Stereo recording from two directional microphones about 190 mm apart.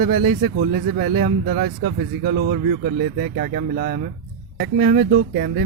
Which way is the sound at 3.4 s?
45° right (ahead or behind).